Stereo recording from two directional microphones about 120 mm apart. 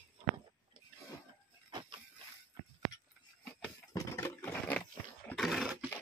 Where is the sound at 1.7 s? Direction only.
35° right (ahead or behind).